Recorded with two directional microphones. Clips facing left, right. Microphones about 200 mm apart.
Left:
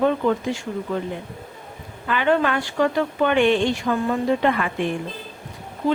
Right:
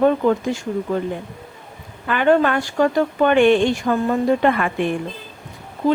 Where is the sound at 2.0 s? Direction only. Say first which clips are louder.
Right 4 dB; 50° right (ahead or behind).